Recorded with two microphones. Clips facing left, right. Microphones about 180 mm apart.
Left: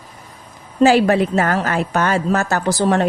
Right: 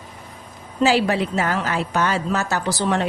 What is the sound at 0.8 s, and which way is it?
A woman's voice, 50° left (ahead or behind).